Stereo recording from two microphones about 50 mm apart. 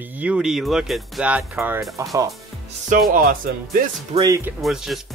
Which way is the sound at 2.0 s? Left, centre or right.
Right.